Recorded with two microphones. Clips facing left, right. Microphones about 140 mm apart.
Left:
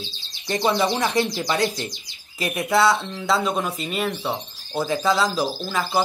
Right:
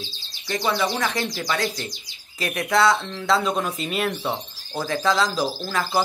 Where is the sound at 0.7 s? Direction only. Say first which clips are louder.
Left 3 dB; 25° left (ahead or behind).